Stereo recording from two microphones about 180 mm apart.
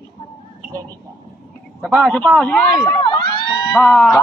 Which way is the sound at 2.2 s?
10° left (ahead or behind).